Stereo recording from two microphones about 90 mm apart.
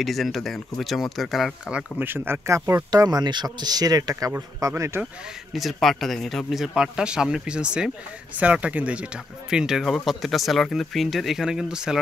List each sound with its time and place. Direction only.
0.0 s speech: centre (ahead or behind)
1.7 s speech: 10° right (ahead or behind)
2.0 s a man's voice: 25° right (ahead or behind)
5.5 s speech: centre (ahead or behind)